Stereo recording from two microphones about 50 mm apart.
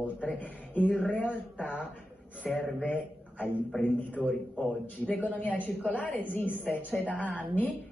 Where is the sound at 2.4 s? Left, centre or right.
Left.